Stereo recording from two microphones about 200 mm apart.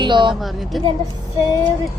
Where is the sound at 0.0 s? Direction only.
25° right (ahead or behind).